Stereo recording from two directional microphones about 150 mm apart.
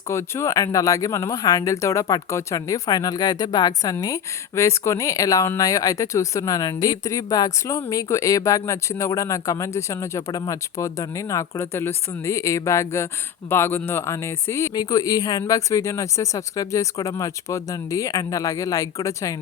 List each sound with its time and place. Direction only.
0.1 s speech: 20° left (ahead or behind)